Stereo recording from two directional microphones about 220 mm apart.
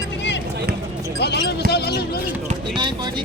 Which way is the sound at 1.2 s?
50° left (ahead or behind).